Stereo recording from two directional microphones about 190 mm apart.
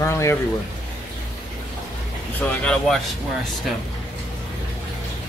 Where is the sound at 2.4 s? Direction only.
5° left (ahead or behind).